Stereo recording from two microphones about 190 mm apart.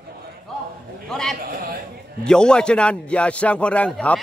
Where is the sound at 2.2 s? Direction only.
5° left (ahead or behind).